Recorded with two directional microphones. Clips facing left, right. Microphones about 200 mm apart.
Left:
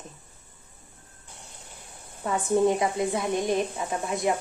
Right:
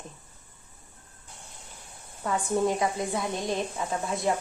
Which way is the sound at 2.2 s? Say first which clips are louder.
Left 3 dB; 20° left (ahead or behind).